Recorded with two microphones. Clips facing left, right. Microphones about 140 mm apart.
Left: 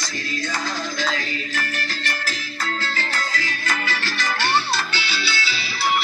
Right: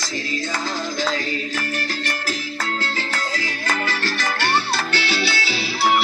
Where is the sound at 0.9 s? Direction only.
40° right (ahead or behind).